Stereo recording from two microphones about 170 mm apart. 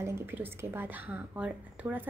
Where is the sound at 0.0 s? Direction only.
15° right (ahead or behind).